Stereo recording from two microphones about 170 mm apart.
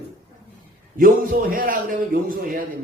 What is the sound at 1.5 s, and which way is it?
A man's voice, 55° right (ahead or behind).